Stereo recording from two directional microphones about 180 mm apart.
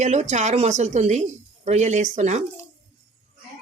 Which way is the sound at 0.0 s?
40° right (ahead or behind).